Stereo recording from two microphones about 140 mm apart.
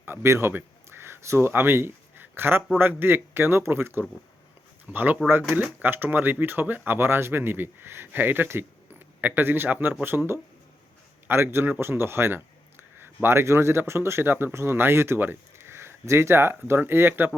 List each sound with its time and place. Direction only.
0.0 s speech: 15° right (ahead or behind)